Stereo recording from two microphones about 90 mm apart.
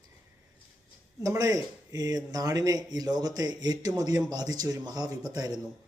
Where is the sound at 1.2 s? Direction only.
40° right (ahead or behind).